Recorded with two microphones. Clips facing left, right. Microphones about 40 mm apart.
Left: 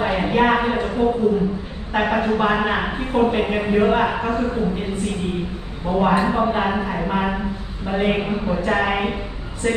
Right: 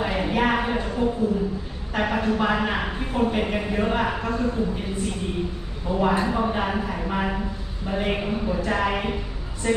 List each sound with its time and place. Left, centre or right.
0.0 s a man's voice: left
9.6 s speech: centre